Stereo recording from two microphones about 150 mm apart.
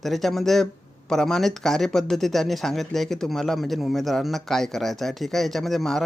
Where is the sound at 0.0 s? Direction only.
Centre (ahead or behind).